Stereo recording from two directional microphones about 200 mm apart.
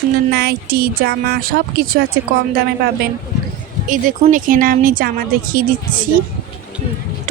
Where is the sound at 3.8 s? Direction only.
40° right (ahead or behind).